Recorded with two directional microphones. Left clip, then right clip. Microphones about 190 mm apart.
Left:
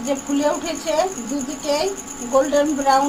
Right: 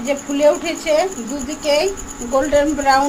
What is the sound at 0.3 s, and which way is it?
Speech, 25° right (ahead or behind).